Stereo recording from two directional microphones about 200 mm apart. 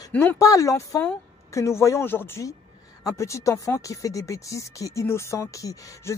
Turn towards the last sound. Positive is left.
turn(degrees=15)  # may be behind; listen again after turning